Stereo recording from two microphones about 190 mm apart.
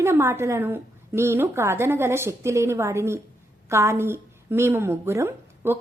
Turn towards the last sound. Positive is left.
turn(degrees=-10)  # may be behind; listen again after turning